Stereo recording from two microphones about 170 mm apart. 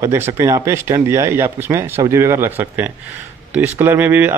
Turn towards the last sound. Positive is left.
turn(degrees=-10)  # may be behind; listen again after turning